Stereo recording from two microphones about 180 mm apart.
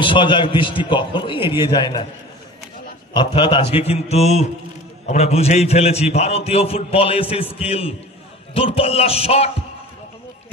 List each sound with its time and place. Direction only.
0.0 s a man's voice: 25° left (ahead or behind)
3.1 s a man's voice: 25° left (ahead or behind)